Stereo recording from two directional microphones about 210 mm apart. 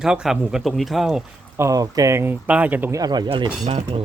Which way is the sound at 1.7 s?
15° right (ahead or behind).